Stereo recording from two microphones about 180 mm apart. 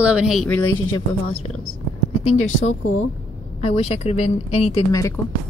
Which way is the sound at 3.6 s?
35° left (ahead or behind).